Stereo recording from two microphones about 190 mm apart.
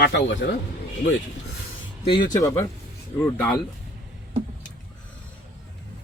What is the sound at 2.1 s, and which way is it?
Speech, 20° left (ahead or behind).